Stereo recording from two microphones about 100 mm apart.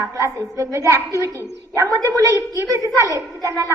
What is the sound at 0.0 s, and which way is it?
A woman's voice, 30° right (ahead or behind).